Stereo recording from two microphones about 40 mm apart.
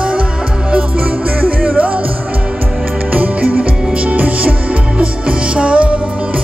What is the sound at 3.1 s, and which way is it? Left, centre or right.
Music, right.